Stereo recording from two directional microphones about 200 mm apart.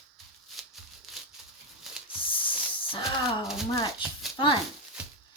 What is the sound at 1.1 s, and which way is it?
Crumpling, centre (ahead or behind).